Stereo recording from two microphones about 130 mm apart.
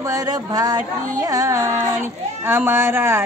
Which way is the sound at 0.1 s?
30° right (ahead or behind).